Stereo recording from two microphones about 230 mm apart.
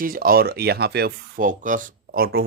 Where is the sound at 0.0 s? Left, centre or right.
Right.